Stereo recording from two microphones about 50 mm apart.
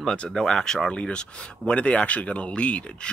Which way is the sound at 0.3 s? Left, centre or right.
Centre.